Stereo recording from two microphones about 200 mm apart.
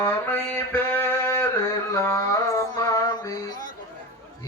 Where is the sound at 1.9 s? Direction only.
15° left (ahead or behind).